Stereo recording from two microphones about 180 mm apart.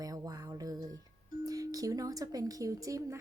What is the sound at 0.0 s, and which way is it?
Music, 20° right (ahead or behind).